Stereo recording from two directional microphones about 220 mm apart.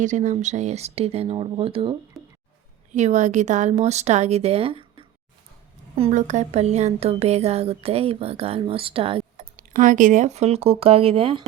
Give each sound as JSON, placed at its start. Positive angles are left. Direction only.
{"t": 0.0, "sound": "a woman's voice", "side_deg": -35}
{"t": 9.7, "sound": "a woman's voice", "side_deg": -35}